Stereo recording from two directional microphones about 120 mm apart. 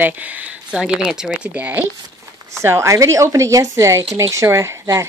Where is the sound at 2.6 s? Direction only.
25° right (ahead or behind).